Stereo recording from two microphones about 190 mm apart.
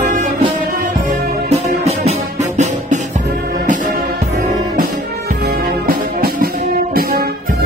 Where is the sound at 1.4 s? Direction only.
35° right (ahead or behind).